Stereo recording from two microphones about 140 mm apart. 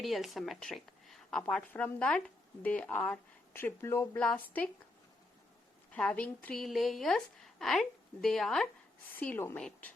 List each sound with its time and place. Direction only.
0.0 s a woman's voice: centre (ahead or behind)
5.9 s a woman's voice: 10° left (ahead or behind)
9.1 s a woman's voice: 15° left (ahead or behind)